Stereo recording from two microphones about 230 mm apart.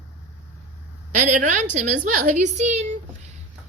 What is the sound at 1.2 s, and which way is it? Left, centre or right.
A woman's voice, right.